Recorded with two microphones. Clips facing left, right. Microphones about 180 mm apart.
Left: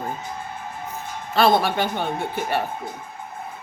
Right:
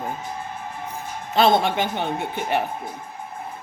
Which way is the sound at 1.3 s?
20° right (ahead or behind).